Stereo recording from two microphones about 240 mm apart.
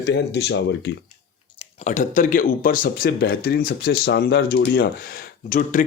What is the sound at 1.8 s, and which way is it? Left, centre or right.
Speech, left.